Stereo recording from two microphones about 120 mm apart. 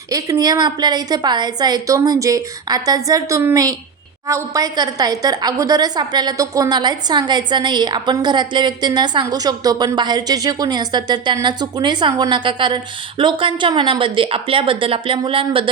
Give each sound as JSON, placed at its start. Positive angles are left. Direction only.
{"t": 0.1, "sound": "a woman's voice", "side_deg": -30}